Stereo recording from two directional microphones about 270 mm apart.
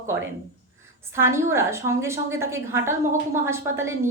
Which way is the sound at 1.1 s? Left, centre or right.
Centre.